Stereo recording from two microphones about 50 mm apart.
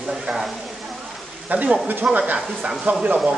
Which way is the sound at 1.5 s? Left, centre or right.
Right.